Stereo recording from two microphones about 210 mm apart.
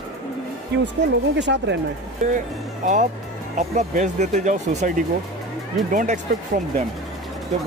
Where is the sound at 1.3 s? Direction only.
55° right (ahead or behind).